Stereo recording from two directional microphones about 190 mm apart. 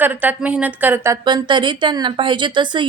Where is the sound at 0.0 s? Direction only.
10° right (ahead or behind).